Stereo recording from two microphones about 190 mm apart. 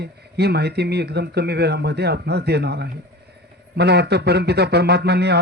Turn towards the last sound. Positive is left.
turn(degrees=-60)  # may be behind; listen again after turning